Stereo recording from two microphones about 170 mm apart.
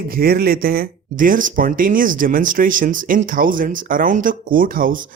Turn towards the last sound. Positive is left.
turn(degrees=-55)  # may be behind; listen again after turning